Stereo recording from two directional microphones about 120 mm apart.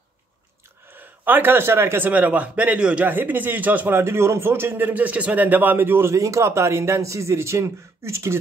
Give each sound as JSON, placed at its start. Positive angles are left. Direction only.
{"t": 0.9, "sound": "a man's voice", "side_deg": -15}